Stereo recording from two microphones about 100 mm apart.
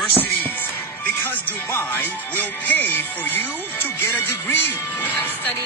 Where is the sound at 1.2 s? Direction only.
20° left (ahead or behind).